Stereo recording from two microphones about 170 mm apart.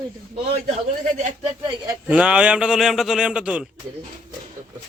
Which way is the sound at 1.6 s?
25° right (ahead or behind).